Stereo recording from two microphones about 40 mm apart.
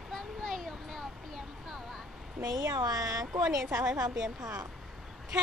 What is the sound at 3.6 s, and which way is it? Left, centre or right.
Speech, centre.